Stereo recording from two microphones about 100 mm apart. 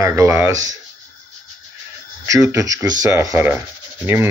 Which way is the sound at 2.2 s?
30° right (ahead or behind).